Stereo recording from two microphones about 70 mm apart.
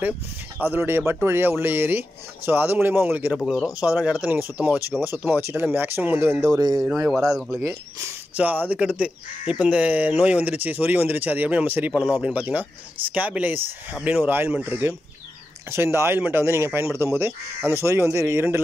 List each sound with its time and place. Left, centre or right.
0.6 s speech: right
6.6 s speech: right
7.3 s speech: centre
8.4 s speech: right
11.9 s speech: centre
12.4 s speech: right